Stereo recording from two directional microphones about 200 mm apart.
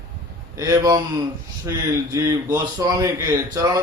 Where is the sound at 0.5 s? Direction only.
15° right (ahead or behind).